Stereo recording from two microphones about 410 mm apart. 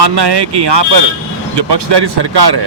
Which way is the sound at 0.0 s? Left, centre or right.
Right.